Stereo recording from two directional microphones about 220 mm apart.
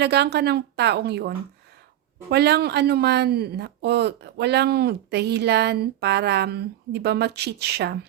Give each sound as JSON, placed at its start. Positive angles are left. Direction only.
{"t": 0.0, "sound": "speech", "side_deg": -50}
{"t": 2.3, "sound": "speech", "side_deg": -50}